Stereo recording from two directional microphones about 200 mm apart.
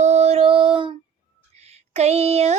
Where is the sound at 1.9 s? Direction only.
30° right (ahead or behind).